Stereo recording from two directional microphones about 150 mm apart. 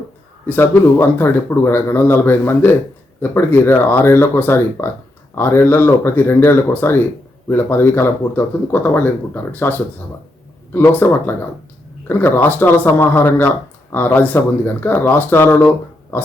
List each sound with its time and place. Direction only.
0.4 s speech: 10° left (ahead or behind)